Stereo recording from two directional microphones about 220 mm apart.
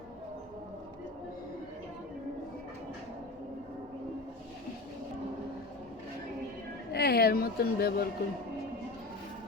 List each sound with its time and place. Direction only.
6.9 s speech: 45° left (ahead or behind)